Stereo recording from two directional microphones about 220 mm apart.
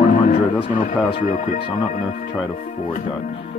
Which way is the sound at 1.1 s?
35° left (ahead or behind).